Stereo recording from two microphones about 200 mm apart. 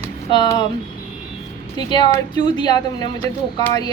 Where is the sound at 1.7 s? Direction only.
20° left (ahead or behind).